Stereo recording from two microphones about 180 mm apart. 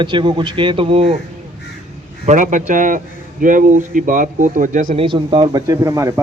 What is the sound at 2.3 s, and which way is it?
Speech, 45° right (ahead or behind).